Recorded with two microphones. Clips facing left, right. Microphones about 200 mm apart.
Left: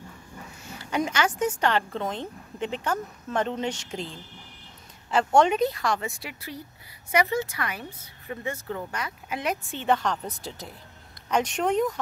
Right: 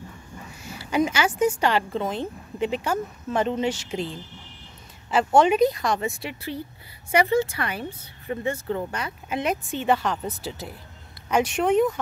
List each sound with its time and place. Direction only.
0.7 s speech: 10° right (ahead or behind)
5.1 s speech: 5° right (ahead or behind)